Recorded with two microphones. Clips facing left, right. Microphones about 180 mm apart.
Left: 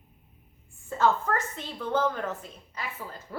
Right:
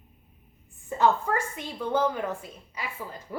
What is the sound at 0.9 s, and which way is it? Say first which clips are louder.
A woman's voice: right 1 dB; 15° right (ahead or behind).